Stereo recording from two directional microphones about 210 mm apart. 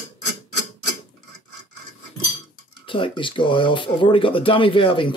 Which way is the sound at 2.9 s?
25° left (ahead or behind).